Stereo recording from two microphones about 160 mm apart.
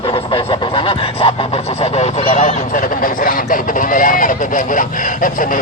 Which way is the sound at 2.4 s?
55° left (ahead or behind).